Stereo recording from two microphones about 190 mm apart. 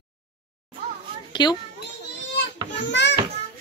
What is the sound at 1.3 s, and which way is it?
Children playing, 25° left (ahead or behind).